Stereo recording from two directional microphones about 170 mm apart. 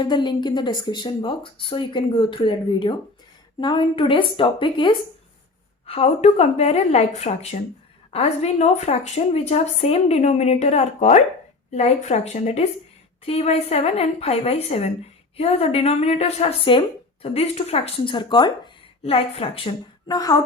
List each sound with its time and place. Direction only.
0.0 s speech: 25° left (ahead or behind)